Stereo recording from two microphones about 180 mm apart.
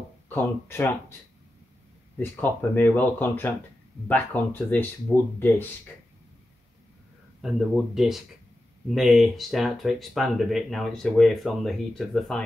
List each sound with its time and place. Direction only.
0.3 s speech: 15° left (ahead or behind)
2.1 s speech: 10° left (ahead or behind)
7.4 s speech: centre (ahead or behind)